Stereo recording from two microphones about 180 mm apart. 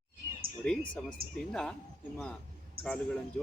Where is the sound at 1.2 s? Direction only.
55° right (ahead or behind).